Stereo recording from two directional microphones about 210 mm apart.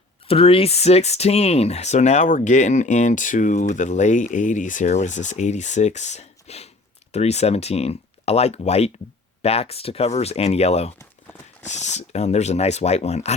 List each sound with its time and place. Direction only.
0.3 s speech: 25° left (ahead or behind)